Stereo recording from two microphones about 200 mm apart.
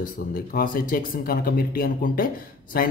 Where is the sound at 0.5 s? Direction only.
45° left (ahead or behind).